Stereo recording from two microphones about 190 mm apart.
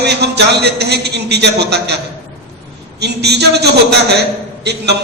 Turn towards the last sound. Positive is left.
turn(degrees=-60)  # may be behind; listen again after turning